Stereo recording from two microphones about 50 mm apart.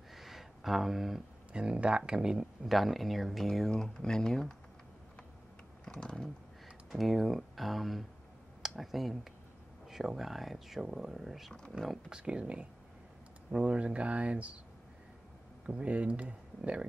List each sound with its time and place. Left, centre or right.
0.1 s a sound: centre
1.5 s speech: centre
3.7 s speech: centre
5.9 s speech: centre
6.9 s speech: centre
11.7 s speech: right
15.6 s speech: right